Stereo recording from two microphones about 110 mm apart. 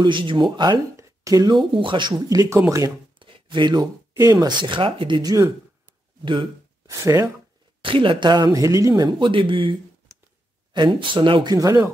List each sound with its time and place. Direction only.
0.0 s speech: 50° right (ahead or behind)
0.9 s speech: 30° right (ahead or behind)
3.2 s a sound: 50° right (ahead or behind)
4.3 s speech: 40° right (ahead or behind)
6.9 s speech: 30° right (ahead or behind)
7.8 s speech: 50° right (ahead or behind)
11.5 s speech: 30° right (ahead or behind)